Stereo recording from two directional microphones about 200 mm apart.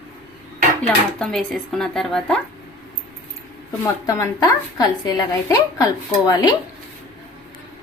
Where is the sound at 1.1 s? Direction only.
5° left (ahead or behind).